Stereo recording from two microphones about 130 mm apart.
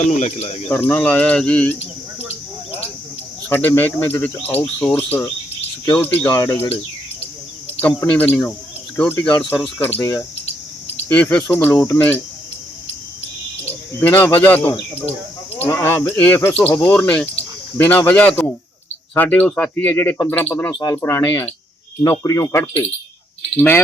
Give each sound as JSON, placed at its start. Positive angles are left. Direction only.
{"t": 0.0, "sound": "speech", "side_deg": 65}
{"t": 0.7, "sound": "speech", "side_deg": 15}
{"t": 3.5, "sound": "speech", "side_deg": 15}
{"t": 7.8, "sound": "speech", "side_deg": 10}
{"t": 10.0, "sound": "speech", "side_deg": 25}
{"t": 11.1, "sound": "speech", "side_deg": 10}
{"t": 14.0, "sound": "speech", "side_deg": 15}
{"t": 20.7, "sound": "speech", "side_deg": 25}
{"t": 23.6, "sound": "speech", "side_deg": 15}